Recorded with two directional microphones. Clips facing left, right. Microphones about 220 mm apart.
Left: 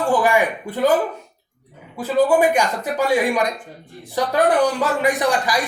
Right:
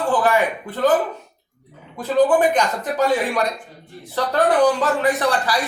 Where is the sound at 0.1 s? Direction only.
15° left (ahead or behind).